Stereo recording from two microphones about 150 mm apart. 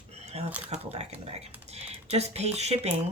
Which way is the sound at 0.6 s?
45° right (ahead or behind).